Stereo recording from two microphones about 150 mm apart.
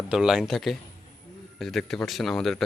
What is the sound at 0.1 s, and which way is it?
Speech, 5° right (ahead or behind).